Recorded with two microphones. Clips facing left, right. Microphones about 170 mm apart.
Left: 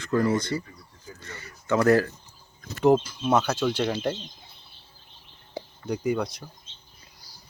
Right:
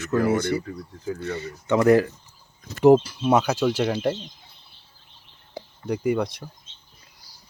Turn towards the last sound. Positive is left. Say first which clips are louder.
# right 3 dB
turn(degrees=-5)  # may be behind; listen again after turning